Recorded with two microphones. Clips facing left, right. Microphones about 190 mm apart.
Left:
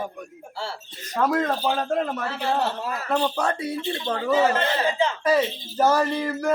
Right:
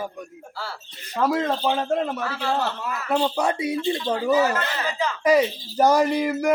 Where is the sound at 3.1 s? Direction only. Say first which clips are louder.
Right 2 dB; 15° right (ahead or behind).